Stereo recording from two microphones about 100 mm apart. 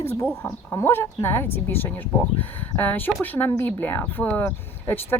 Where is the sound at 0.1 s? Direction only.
20° left (ahead or behind).